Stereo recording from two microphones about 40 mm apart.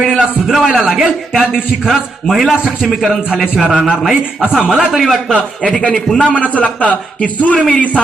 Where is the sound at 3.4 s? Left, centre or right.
Right.